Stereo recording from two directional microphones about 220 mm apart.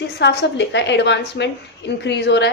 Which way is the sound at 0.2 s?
55° left (ahead or behind).